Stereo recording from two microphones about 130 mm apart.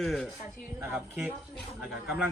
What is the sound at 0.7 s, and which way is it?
Speech, 15° right (ahead or behind).